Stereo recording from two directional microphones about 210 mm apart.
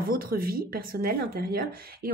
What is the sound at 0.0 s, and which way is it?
Speech, 45° right (ahead or behind).